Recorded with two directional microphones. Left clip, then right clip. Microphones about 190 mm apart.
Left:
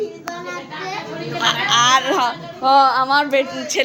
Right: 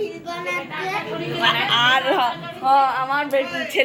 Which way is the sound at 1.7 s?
10° left (ahead or behind).